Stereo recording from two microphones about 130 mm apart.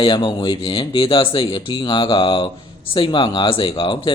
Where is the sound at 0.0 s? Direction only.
35° left (ahead or behind).